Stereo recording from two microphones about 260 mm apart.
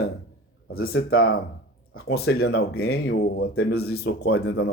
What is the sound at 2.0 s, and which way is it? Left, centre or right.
Speech, left.